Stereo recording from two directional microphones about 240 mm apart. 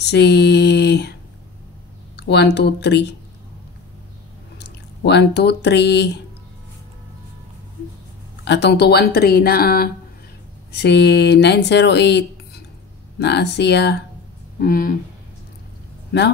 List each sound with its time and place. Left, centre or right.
0.0 s a sound: left
2.1 s speech: left
4.6 s speech: left
8.5 s speech: left